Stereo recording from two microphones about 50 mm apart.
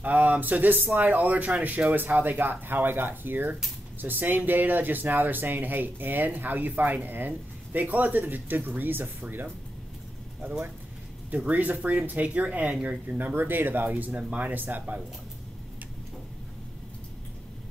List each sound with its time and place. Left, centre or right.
0.0 s speech: right
11.3 s speech: right
13.3 s speech: right